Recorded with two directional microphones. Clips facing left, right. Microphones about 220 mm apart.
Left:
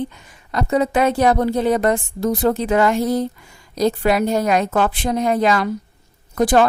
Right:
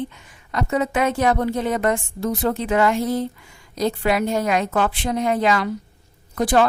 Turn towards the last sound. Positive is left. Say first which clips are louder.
# left 3 dB
turn(degrees=45)  # may be behind; listen again after turning